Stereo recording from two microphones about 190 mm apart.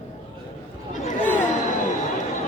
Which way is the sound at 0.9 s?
40° left (ahead or behind).